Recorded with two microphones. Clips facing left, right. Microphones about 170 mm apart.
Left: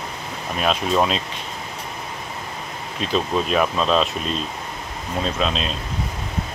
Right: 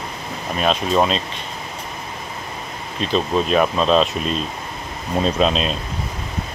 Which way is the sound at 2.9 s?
5° left (ahead or behind).